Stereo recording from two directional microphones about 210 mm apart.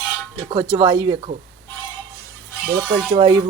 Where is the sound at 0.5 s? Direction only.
20° right (ahead or behind).